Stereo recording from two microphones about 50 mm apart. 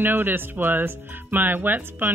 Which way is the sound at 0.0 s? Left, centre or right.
Right.